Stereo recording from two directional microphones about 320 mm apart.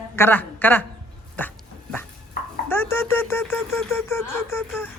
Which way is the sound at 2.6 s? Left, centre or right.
Centre.